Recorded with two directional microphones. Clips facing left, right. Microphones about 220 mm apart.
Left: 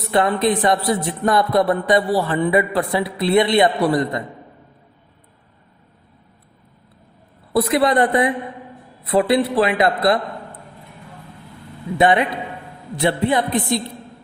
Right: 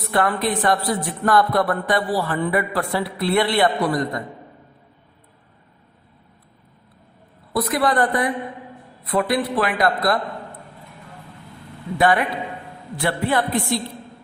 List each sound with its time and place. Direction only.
0.1 s speech: 20° left (ahead or behind)
7.5 s speech: 25° left (ahead or behind)
11.9 s speech: 20° left (ahead or behind)